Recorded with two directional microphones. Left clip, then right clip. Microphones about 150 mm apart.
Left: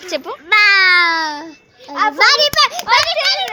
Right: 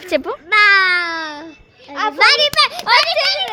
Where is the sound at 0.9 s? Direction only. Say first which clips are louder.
Left 6 dB; 60° left (ahead or behind).